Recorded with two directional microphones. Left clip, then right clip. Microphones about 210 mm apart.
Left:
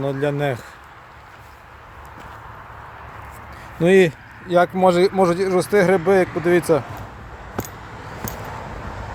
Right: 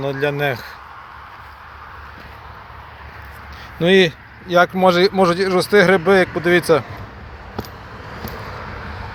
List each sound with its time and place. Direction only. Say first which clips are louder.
0.0 s speech: right 2 dB; 15° left (ahead or behind)
3.8 s speech: right 1 dB; 15° left (ahead or behind)
4.4 s speech: right 2 dB; 5° left (ahead or behind)